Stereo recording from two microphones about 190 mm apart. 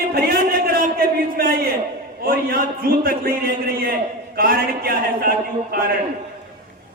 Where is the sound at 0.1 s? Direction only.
55° right (ahead or behind).